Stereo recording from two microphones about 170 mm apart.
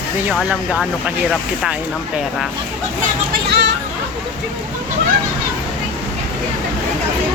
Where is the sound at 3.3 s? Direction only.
75° right (ahead or behind).